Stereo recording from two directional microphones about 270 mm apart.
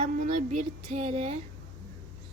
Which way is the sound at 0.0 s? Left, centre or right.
Right.